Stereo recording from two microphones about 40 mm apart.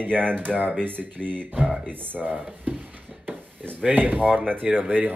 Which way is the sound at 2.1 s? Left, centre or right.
Right.